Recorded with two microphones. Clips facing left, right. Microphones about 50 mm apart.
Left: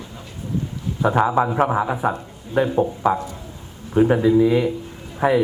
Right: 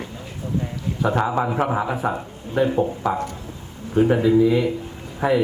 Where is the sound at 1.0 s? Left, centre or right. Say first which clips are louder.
Left 3 dB; centre.